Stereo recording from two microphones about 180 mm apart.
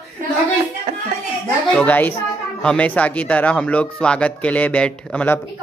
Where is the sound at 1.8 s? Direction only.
10° left (ahead or behind).